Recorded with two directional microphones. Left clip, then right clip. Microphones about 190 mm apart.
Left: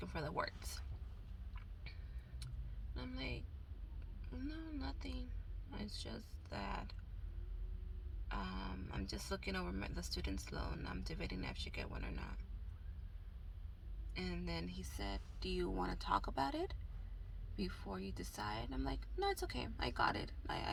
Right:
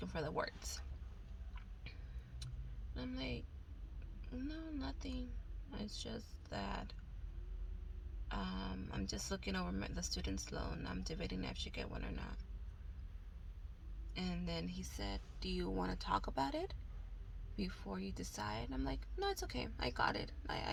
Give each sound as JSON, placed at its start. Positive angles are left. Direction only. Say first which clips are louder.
{"t": 0.0, "sound": "speech", "louder": "right 1 dB", "side_deg": -25}
{"t": 2.9, "sound": "a woman's voice", "louder": "right 2 dB", "side_deg": -25}
{"t": 4.3, "sound": "speech", "louder": "right 2 dB", "side_deg": -25}
{"t": 8.3, "sound": "speech", "louder": "right 1 dB", "side_deg": -25}
{"t": 14.3, "sound": "speech", "louder": "right 2 dB", "side_deg": -25}